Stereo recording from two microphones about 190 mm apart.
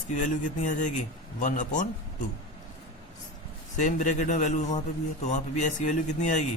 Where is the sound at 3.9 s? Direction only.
40° left (ahead or behind).